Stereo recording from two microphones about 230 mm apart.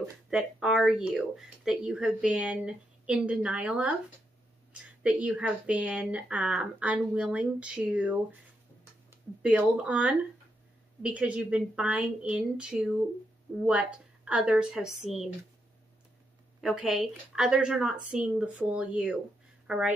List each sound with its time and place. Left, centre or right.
0.0 s speech: centre
5.0 s speech: centre
16.6 s speech: centre